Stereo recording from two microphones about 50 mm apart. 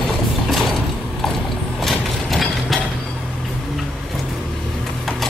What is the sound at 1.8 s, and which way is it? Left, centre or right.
Vehicle, centre.